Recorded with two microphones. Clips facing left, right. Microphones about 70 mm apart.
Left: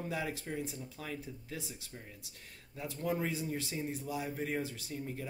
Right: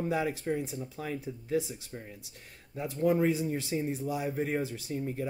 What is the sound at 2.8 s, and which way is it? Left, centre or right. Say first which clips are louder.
Speech: right 9 dB; right.